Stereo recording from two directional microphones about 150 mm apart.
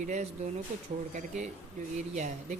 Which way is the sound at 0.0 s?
50° right (ahead or behind).